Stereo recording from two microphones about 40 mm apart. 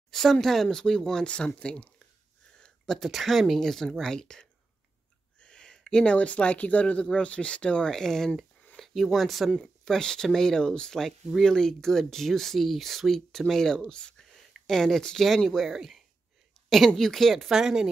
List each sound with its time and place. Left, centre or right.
0.1 s speech: centre; by 2.0 s left
2.5 s a sound: left
3.0 s speech: centre
5.4 s a sound: left
6.1 s speech: left
7.9 s speech: centre
9.8 s speech: centre
14.5 s a woman's voice: centre
17.5 s speech: centre